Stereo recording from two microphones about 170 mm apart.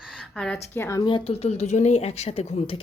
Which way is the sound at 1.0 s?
30° left (ahead or behind).